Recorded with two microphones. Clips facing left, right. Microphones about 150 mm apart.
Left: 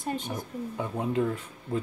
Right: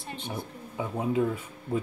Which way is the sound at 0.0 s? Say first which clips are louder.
Left 7 dB; 45° left (ahead or behind).